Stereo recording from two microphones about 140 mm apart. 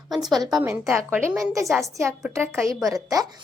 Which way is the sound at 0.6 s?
15° right (ahead or behind).